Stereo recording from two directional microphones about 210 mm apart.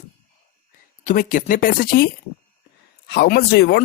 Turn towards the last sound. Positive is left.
turn(degrees=50)  # may be behind; listen again after turning